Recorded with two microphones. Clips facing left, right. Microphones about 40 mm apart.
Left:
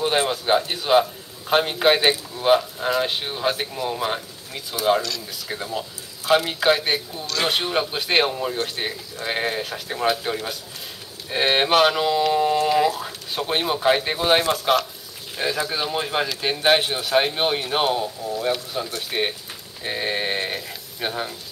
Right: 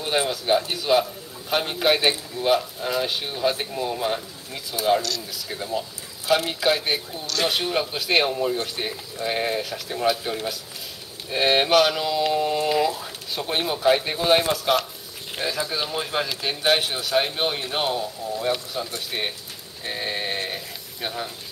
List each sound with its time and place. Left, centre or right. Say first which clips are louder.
0.0 s speech: left 3 dB; centre
7.2 s speech: left 1 dB; left
7.5 s speech: left 1 dB; centre